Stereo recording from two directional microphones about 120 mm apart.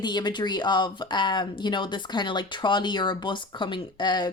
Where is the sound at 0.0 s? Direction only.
35° left (ahead or behind).